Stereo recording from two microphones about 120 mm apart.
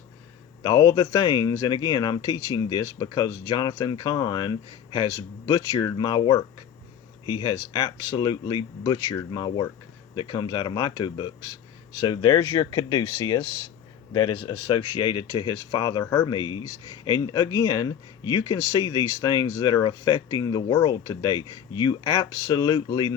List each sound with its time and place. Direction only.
0.6 s speech: 35° left (ahead or behind)